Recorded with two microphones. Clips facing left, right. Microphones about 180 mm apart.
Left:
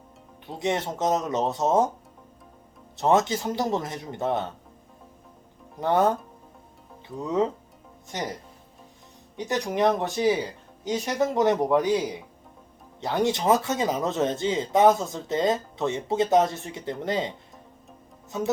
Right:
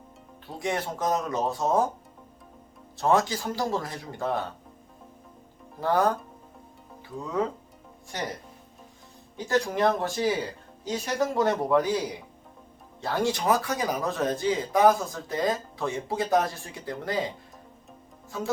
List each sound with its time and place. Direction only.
0.4 s speech: 20° left (ahead or behind)
2.9 s speech: 20° left (ahead or behind)
5.8 s speech: 25° left (ahead or behind)
7.2 s speech: 20° left (ahead or behind)
9.4 s speech: 20° left (ahead or behind)